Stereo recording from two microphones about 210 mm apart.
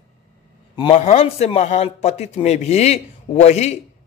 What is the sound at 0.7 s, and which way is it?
A man's voice, 30° left (ahead or behind).